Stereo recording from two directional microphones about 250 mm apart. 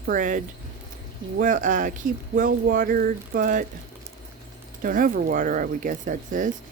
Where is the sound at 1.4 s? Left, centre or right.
Right.